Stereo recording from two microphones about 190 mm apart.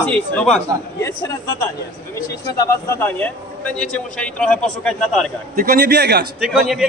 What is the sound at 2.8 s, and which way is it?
A man's voice, 10° left (ahead or behind).